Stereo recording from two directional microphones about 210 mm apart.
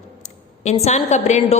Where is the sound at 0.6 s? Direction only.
30° left (ahead or behind).